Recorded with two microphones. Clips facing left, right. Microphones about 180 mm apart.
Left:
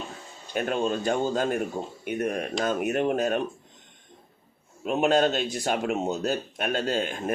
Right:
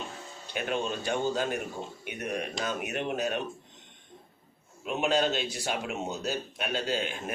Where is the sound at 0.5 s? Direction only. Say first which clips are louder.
Left 5 dB; 45° left (ahead or behind).